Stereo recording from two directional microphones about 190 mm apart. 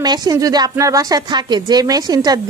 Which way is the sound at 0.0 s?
20° right (ahead or behind).